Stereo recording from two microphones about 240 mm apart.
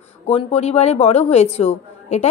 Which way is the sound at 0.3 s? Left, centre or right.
Left.